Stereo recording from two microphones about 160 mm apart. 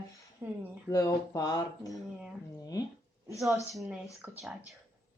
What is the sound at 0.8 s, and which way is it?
Speech, 20° left (ahead or behind).